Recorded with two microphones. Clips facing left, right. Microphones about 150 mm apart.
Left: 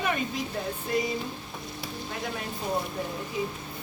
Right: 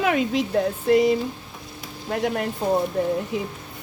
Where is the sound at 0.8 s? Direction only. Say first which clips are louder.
Right 11 dB; 75° right (ahead or behind).